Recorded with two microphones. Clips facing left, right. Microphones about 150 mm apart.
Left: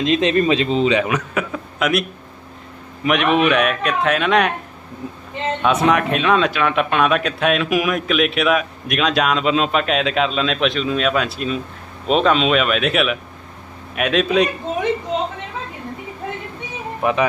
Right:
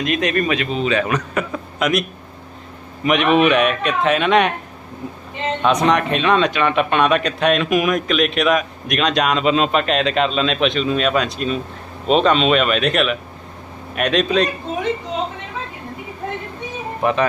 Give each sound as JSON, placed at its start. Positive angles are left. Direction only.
{"t": 0.0, "sound": "a man's voice", "side_deg": 25}
{"t": 1.0, "sound": "speech", "side_deg": 5}
{"t": 5.8, "sound": "speech", "side_deg": 5}
{"t": 17.0, "sound": "speech", "side_deg": 5}